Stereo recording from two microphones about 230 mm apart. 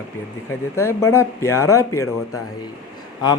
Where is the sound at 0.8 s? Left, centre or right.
Centre.